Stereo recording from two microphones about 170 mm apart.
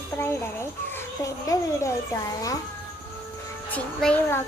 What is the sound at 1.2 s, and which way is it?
Speech, 20° left (ahead or behind).